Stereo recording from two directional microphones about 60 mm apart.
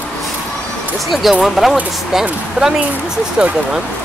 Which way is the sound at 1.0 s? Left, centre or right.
Centre.